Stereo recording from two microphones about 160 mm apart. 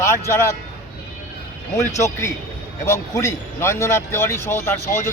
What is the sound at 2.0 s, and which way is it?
Speech, 20° left (ahead or behind).